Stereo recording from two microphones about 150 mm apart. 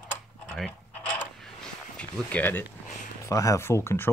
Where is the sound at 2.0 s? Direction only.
10° left (ahead or behind).